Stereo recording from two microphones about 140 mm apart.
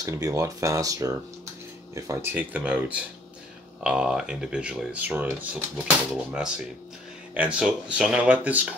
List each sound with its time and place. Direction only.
0.0 s speech: 25° right (ahead or behind)